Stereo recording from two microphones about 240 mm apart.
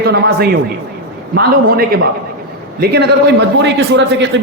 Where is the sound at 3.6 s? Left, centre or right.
Right.